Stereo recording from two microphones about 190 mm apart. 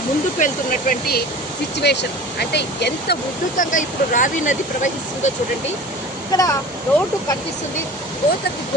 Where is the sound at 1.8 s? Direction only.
60° left (ahead or behind).